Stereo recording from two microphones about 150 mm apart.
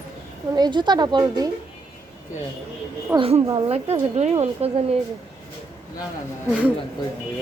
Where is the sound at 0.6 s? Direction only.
30° right (ahead or behind).